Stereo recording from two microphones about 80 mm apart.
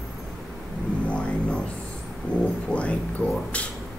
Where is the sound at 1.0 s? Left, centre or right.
Centre.